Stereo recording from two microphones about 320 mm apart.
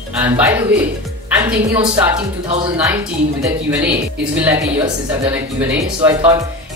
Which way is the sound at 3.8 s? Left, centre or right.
Centre.